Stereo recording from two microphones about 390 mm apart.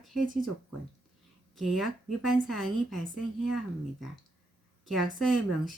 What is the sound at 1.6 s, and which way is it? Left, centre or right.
A woman's voice, centre.